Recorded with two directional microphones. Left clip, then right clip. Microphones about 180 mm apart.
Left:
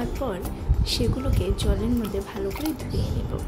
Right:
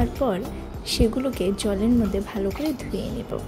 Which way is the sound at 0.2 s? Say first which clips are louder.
Right 5 dB; 20° right (ahead or behind).